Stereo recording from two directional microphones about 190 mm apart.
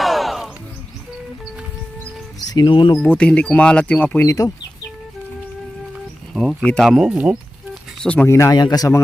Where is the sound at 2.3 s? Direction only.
20° left (ahead or behind).